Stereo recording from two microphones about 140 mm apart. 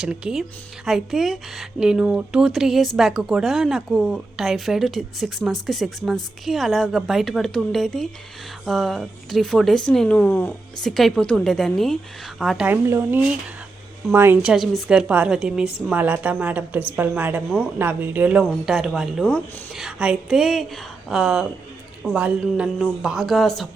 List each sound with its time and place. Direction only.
0.0 s speech: 5° right (ahead or behind); by 10.5 s 15° left (ahead or behind)
10.8 s speech: centre (ahead or behind)
12.6 s a woman's voice: 15° right (ahead or behind); by 23.6 s centre (ahead or behind)